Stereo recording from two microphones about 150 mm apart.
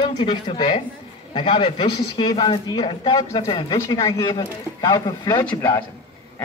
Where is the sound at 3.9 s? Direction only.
20° left (ahead or behind).